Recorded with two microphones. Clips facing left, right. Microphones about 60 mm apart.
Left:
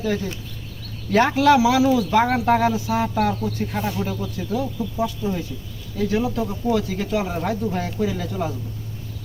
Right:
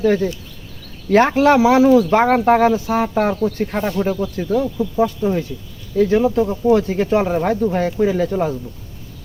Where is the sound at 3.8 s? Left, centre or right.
Centre.